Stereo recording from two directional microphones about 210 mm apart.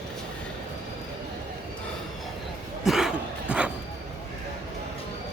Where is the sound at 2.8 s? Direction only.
Centre (ahead or behind).